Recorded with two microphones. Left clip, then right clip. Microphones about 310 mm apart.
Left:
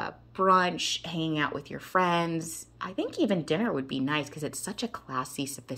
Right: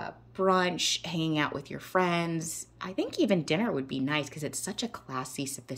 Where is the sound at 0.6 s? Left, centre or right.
Right.